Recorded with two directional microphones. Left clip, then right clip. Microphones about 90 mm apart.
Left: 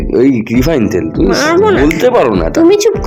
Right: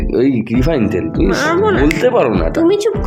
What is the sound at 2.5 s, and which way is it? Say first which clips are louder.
Speech: left 6 dB; 55° left (ahead or behind).